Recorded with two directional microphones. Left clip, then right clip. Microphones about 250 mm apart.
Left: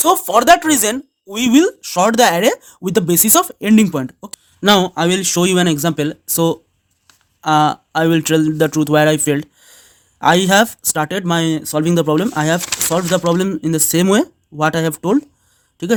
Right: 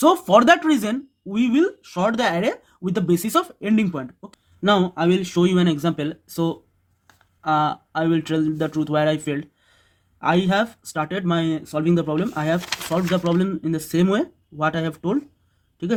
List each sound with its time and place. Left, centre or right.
0.0 s speech: left